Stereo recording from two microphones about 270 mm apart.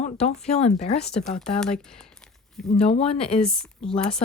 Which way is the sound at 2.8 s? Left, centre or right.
Left.